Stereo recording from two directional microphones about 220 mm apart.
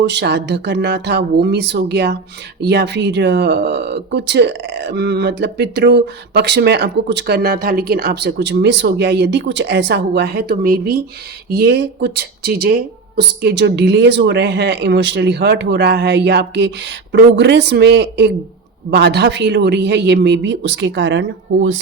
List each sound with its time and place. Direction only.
0.0 s speech: 50° right (ahead or behind)